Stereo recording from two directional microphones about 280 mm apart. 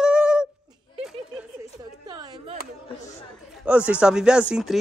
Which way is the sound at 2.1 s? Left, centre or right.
Centre.